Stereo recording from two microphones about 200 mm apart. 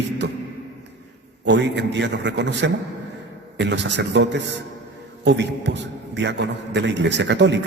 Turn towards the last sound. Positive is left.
turn(degrees=-60)  # may be behind; listen again after turning